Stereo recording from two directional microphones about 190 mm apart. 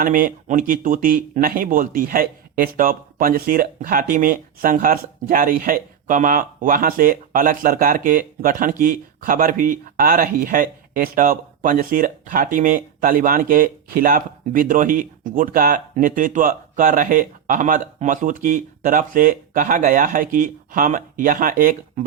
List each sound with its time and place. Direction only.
0.0 s speech: 45° right (ahead or behind)